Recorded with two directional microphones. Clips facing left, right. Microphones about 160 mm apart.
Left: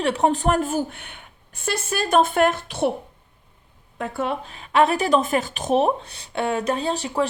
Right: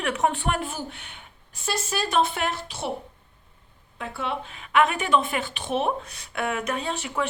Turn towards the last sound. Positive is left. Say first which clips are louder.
# left 5 dB
turn(degrees=35)  # may be behind; listen again after turning